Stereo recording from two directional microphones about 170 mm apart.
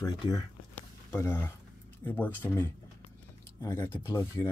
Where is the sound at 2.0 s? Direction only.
10° left (ahead or behind).